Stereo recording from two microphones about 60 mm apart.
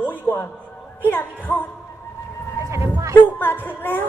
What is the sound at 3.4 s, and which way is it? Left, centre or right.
Speech, left.